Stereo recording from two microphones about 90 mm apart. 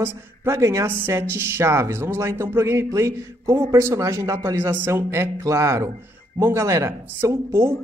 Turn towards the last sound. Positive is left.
turn(degrees=-30)  # may be behind; listen again after turning